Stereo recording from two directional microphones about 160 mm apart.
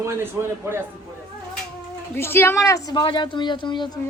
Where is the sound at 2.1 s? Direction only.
15° left (ahead or behind).